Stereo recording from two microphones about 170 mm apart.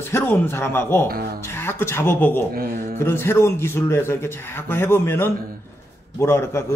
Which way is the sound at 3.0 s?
15° left (ahead or behind).